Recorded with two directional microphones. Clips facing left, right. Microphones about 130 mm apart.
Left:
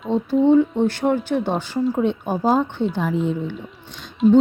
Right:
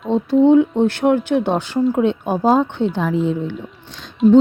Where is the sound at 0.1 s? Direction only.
75° right (ahead or behind).